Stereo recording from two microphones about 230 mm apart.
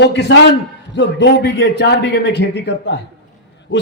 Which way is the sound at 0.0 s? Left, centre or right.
Left.